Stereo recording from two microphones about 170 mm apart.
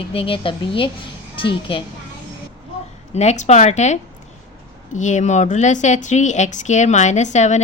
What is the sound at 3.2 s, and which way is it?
Speech, 40° left (ahead or behind).